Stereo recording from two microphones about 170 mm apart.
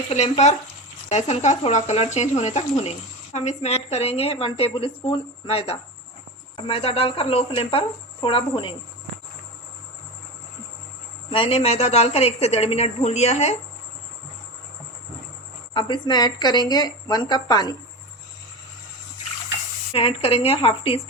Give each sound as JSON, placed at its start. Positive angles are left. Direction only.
{"t": 0.1, "sound": "a woman's voice", "side_deg": 40}
{"t": 11.3, "sound": "a woman's voice", "side_deg": 35}
{"t": 15.7, "sound": "a woman's voice", "side_deg": 25}
{"t": 19.9, "sound": "a woman's voice", "side_deg": 35}